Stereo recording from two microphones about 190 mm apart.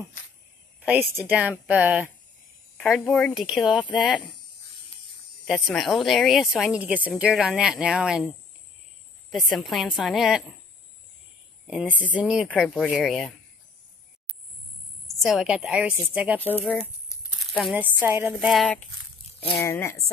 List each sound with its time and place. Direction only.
0.7 s speech: 5° right (ahead or behind)
2.8 s a woman's voice: centre (ahead or behind)
5.5 s a woman's voice: centre (ahead or behind)
9.3 s a woman's voice: centre (ahead or behind)
11.6 s a woman's voice: 5° right (ahead or behind)
15.0 s a woman's voice: centre (ahead or behind)
16.6 s crumpling: 5° left (ahead or behind)
17.7 s speech: 10° right (ahead or behind)
19.6 s speech: 15° left (ahead or behind)